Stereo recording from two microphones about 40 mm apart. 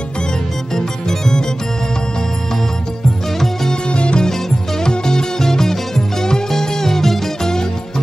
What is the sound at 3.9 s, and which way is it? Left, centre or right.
Music, left.